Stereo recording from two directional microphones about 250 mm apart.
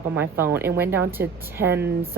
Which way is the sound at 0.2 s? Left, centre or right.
Centre.